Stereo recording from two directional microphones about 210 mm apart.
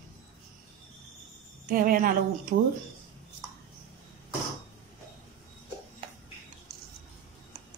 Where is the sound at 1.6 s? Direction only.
40° right (ahead or behind).